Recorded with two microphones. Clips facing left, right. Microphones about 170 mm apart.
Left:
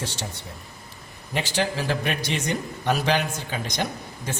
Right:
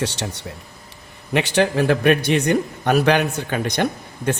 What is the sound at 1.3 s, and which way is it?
Speech, 70° right (ahead or behind).